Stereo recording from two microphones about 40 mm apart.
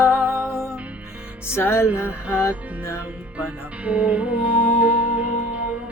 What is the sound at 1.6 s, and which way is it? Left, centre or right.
Music, left.